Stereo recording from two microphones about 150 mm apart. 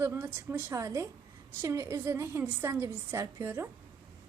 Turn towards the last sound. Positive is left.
turn(degrees=-15)  # may be behind; listen again after turning